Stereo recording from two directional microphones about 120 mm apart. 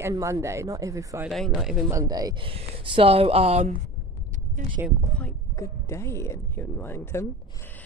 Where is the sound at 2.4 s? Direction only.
45° right (ahead or behind).